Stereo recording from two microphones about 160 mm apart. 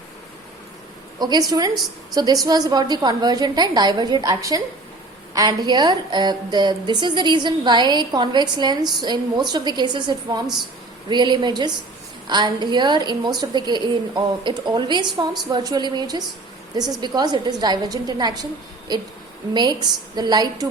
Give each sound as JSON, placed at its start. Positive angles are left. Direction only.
{"t": 1.2, "sound": "a woman's voice", "side_deg": -25}
{"t": 10.4, "sound": "a woman's voice", "side_deg": 0}
{"t": 11.1, "sound": "a woman's voice", "side_deg": -30}